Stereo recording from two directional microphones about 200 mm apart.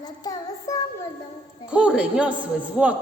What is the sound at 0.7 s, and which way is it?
Music, 15° left (ahead or behind).